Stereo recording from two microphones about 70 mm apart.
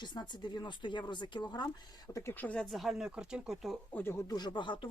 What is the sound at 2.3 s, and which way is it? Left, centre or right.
Speech, left.